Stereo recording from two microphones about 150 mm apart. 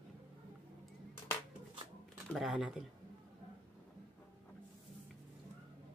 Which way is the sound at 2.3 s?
5° right (ahead or behind).